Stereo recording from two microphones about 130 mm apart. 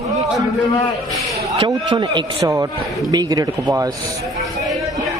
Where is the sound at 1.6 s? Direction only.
35° right (ahead or behind).